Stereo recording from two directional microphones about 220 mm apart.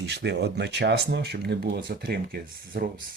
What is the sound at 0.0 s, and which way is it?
Speech, 50° right (ahead or behind).